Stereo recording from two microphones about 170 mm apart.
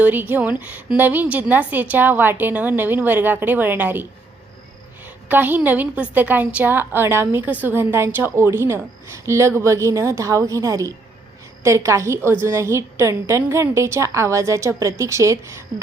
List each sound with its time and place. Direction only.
0.0 s a woman's voice: 10° right (ahead or behind)
5.0 s a woman's voice: 10° right (ahead or behind)